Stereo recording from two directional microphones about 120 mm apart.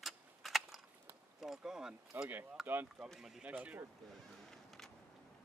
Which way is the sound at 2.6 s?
15° right (ahead or behind).